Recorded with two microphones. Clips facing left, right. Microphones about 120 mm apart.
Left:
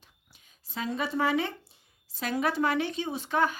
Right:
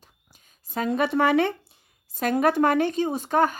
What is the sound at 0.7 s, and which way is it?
Speech, 55° right (ahead or behind).